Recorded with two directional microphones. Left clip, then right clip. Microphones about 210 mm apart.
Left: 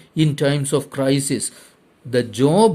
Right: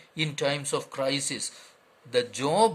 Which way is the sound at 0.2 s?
30° left (ahead or behind).